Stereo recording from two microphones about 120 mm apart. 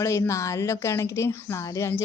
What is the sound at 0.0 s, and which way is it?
Speech, 25° left (ahead or behind).